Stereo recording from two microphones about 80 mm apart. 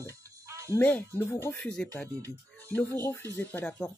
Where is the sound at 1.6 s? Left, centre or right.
Centre.